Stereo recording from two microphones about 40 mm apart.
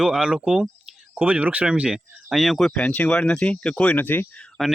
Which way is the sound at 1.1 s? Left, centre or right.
Right.